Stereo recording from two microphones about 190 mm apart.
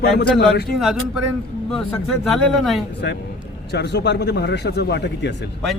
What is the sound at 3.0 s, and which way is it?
A man's voice, 60° left (ahead or behind).